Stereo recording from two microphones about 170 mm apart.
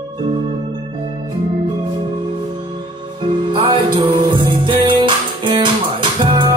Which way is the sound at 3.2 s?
30° right (ahead or behind).